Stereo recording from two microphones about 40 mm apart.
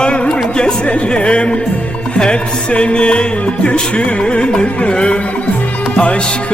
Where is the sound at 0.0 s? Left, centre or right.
Left.